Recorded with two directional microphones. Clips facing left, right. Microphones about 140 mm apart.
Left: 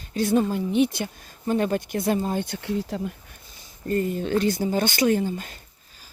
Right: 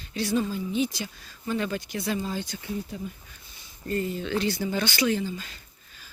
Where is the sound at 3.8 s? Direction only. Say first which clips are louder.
Left 4 dB; 45° left (ahead or behind).